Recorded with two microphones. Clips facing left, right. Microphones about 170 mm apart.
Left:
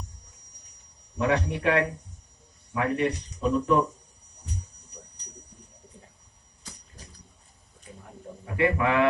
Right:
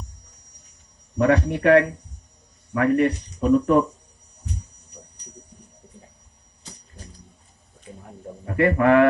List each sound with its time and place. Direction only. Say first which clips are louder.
1.1 s speech: right 6 dB; 50° right (ahead or behind)
8.5 s speech: right 7 dB; 50° right (ahead or behind)